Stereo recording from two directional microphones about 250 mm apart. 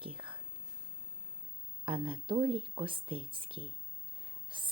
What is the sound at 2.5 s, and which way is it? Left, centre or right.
Speech, centre.